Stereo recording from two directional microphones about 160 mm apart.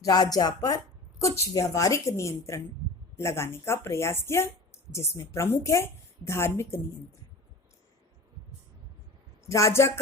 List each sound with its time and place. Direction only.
0.0 s a woman's voice: 25° left (ahead or behind)
9.5 s a woman's voice: 20° left (ahead or behind)